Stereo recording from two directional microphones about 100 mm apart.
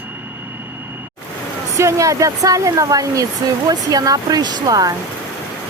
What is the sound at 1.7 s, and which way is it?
Speech, 30° right (ahead or behind).